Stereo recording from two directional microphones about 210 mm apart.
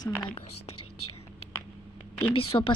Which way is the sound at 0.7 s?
90° left.